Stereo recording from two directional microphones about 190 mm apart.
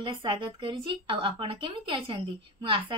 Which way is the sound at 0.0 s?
25° right (ahead or behind).